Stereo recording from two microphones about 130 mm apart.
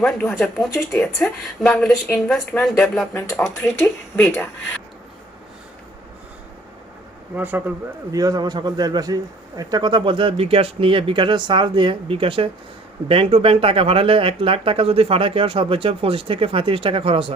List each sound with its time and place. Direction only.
0.0 s speech: 5° left (ahead or behind)
3.6 s speech: 20° left (ahead or behind)
7.3 s speech: 15° right (ahead or behind)
8.1 s a man's voice: 30° right (ahead or behind); by 17.3 s 45° right (ahead or behind)